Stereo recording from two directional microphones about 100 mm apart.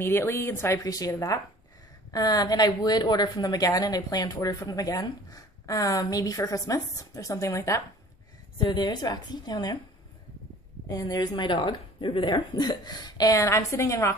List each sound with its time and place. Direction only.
0.0 s speech: 25° left (ahead or behind)
0.8 s a woman's voice: 35° left (ahead or behind)
8.5 s a woman's voice: 55° left (ahead or behind)
10.9 s a woman's voice: 40° left (ahead or behind)